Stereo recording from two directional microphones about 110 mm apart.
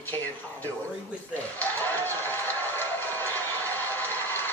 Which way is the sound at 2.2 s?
20° left (ahead or behind).